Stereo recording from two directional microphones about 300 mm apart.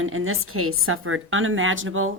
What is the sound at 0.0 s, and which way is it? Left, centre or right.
Speech, right.